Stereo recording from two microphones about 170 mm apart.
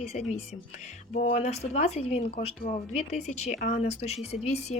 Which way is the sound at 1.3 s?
40° left (ahead or behind).